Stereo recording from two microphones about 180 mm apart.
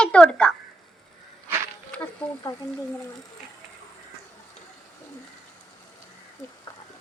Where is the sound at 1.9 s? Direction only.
20° left (ahead or behind).